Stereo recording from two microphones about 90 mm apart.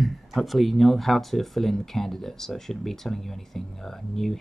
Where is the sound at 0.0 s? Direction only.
Centre (ahead or behind).